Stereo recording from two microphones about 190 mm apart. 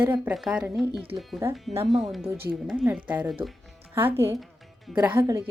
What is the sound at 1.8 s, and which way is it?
A woman's voice, centre (ahead or behind).